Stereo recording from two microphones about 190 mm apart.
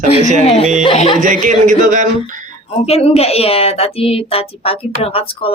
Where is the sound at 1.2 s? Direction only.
45° right (ahead or behind).